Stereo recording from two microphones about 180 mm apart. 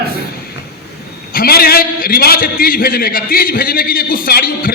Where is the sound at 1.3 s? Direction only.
55° left (ahead or behind).